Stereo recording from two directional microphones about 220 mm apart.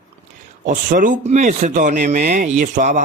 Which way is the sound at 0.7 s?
35° right (ahead or behind).